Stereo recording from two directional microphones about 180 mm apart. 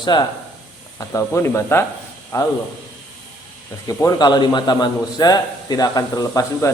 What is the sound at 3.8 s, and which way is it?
A man's voice, 20° left (ahead or behind).